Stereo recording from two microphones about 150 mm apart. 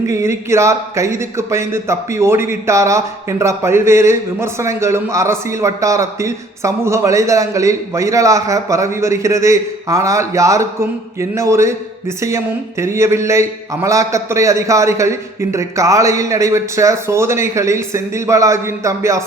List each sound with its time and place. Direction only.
0.1 s a man's voice: 20° right (ahead or behind)